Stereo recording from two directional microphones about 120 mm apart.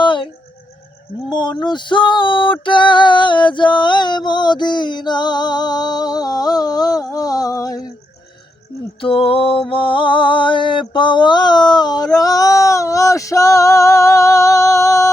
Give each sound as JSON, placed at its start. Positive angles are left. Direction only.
{"t": 0.0, "sound": "a sound", "side_deg": 45}
{"t": 1.3, "sound": "music", "side_deg": 35}
{"t": 9.0, "sound": "music", "side_deg": 50}